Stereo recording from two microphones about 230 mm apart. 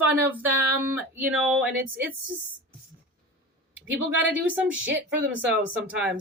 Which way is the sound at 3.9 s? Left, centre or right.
Right.